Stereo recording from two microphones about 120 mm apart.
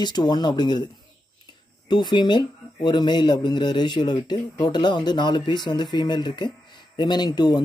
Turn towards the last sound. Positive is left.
turn(degrees=35)  # may be behind; listen again after turning